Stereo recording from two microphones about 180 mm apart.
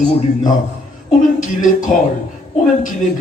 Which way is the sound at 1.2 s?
45° left (ahead or behind).